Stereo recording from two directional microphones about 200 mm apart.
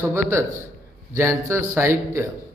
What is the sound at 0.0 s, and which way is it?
A man's voice, 10° right (ahead or behind).